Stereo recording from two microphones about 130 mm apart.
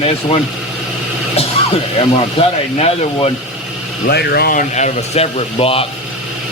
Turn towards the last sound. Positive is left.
turn(degrees=45)  # may be behind; listen again after turning